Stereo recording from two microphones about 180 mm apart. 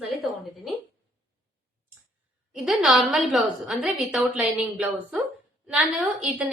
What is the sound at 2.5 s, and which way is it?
A woman's voice, 5° right (ahead or behind).